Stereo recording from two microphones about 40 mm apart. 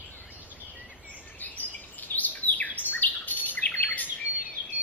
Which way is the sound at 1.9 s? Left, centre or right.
Left.